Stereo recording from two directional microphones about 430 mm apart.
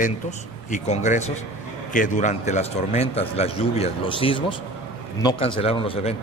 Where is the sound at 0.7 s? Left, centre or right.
Centre.